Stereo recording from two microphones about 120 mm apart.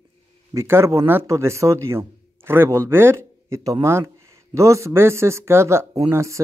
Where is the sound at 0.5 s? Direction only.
20° right (ahead or behind).